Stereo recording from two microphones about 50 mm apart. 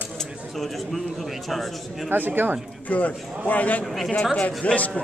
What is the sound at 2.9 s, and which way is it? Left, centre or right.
Speech, left.